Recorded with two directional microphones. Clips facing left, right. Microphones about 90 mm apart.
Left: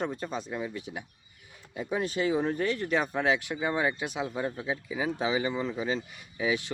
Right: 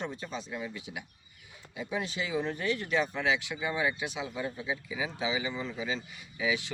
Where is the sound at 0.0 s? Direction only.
45° left (ahead or behind).